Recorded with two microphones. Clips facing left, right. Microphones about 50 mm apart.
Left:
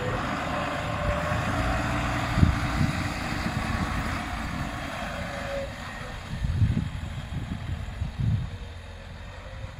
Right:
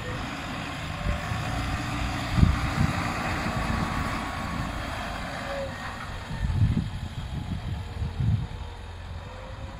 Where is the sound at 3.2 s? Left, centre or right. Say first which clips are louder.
Right 1 dB; centre.